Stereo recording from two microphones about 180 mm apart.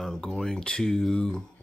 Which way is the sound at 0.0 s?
Centre (ahead or behind).